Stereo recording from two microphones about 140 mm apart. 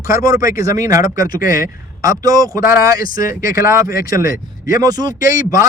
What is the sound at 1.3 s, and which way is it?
Speech, 90° left.